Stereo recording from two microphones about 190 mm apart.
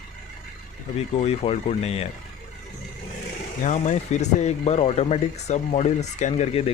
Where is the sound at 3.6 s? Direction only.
40° left (ahead or behind).